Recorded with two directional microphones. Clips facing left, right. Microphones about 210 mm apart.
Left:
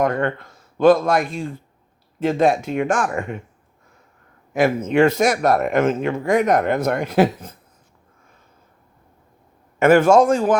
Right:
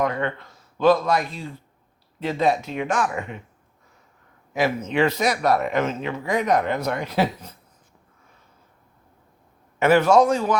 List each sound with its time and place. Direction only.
0.0 s speech: 50° left (ahead or behind)
4.5 s speech: 50° left (ahead or behind)
9.7 s speech: 50° left (ahead or behind)